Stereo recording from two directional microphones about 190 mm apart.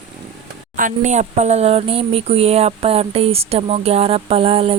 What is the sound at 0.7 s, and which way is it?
Speech, 40° right (ahead or behind).